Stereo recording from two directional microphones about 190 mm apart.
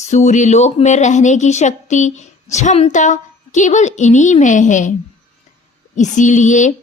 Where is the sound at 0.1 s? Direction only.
40° left (ahead or behind).